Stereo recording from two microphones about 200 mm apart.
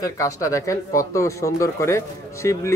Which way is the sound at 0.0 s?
15° left (ahead or behind).